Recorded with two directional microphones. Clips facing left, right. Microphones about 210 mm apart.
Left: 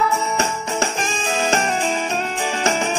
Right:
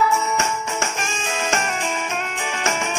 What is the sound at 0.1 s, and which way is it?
Music, 35° left (ahead or behind).